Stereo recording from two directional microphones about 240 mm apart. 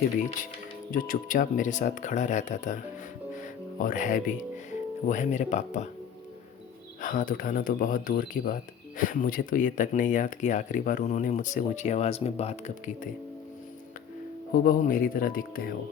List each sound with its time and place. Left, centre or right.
0.9 s speech: left
3.3 s music: left
5.0 s speech: left
7.0 s speech: left
14.5 s speech: left